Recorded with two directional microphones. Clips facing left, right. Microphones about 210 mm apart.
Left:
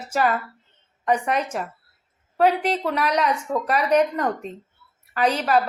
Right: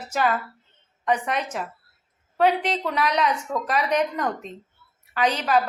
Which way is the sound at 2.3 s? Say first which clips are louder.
Left 2 dB; 5° left (ahead or behind).